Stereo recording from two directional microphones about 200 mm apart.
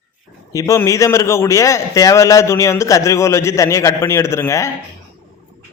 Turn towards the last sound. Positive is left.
turn(degrees=15)  # may be behind; listen again after turning